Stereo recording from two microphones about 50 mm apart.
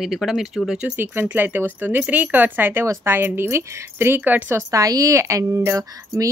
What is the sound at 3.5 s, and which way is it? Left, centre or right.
Speech, right.